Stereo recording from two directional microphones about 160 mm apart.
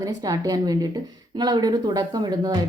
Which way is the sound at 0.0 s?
25° right (ahead or behind).